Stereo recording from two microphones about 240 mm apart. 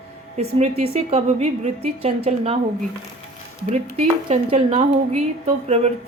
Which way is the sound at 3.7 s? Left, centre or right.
Right.